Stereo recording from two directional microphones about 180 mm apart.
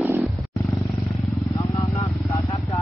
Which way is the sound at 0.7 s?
Centre (ahead or behind).